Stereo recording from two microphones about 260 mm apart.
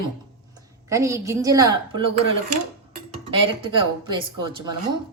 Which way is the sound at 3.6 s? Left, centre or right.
Centre.